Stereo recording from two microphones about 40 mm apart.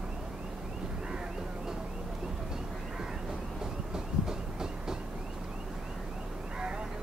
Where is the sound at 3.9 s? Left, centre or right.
Centre.